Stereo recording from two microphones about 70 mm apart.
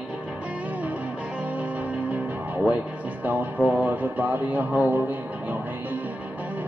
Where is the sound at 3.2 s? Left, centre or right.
Right.